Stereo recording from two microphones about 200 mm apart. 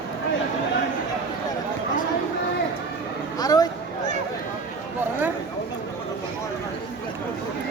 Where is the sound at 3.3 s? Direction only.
20° left (ahead or behind).